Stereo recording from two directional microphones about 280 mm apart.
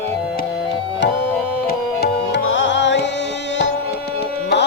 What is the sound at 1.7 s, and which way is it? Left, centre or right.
Music, left.